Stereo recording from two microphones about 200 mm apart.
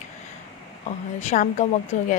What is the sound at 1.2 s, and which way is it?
Speech, 35° left (ahead or behind).